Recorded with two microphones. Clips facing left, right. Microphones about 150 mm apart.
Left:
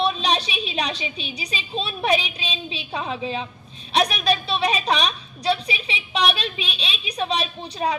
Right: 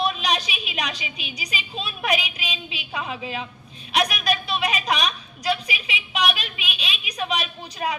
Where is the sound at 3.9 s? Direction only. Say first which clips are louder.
Left 2 dB; 30° left (ahead or behind).